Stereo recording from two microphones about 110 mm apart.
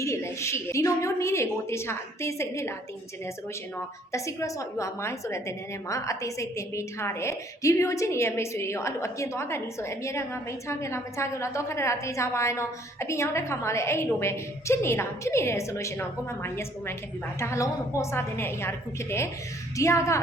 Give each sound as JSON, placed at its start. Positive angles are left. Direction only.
{"t": 0.0, "sound": "a woman's voice", "side_deg": 25}
{"t": 3.8, "sound": "a woman's voice", "side_deg": 25}
{"t": 19.7, "sound": "a woman's voice", "side_deg": 25}